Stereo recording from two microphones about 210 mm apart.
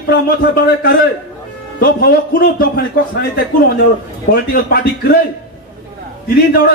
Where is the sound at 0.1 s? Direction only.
50° left (ahead or behind).